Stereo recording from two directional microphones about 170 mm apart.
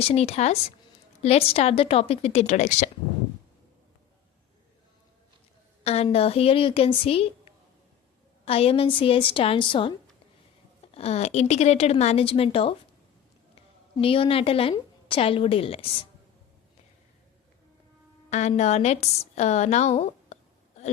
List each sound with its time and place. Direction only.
0.0 s a woman's voice: 35° left (ahead or behind)
5.8 s a woman's voice: 35° left (ahead or behind)
8.4 s a woman's voice: 35° left (ahead or behind)
10.9 s a woman's voice: 40° left (ahead or behind)
13.9 s a woman's voice: 30° left (ahead or behind)
18.3 s a woman's voice: 40° left (ahead or behind)